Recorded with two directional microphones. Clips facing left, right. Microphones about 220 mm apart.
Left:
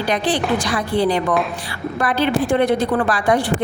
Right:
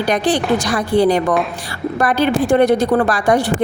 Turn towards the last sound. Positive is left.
turn(degrees=-45)  # may be behind; listen again after turning